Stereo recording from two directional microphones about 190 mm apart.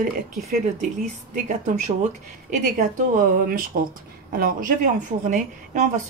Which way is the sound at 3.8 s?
50° right (ahead or behind).